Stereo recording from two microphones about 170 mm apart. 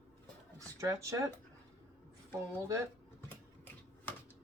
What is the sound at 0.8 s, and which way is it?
Speech, 20° right (ahead or behind).